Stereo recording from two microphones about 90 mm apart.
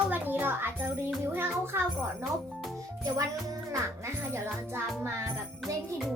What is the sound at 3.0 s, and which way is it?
Music, 35° right (ahead or behind).